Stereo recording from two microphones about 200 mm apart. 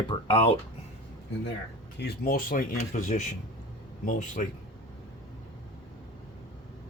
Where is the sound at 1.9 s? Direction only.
50° left (ahead or behind).